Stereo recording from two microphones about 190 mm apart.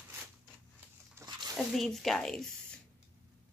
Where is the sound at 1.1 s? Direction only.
15° right (ahead or behind).